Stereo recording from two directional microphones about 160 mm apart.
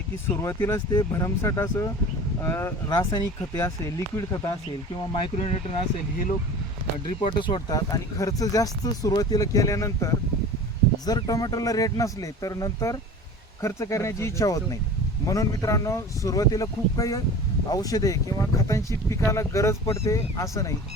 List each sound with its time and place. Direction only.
0.3 s speech: 15° left (ahead or behind)
5.4 s speech: 45° left (ahead or behind)
7.2 s speech: 35° left (ahead or behind)